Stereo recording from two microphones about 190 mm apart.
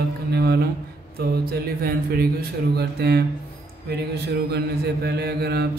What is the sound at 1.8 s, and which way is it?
Mantra, 55° right (ahead or behind).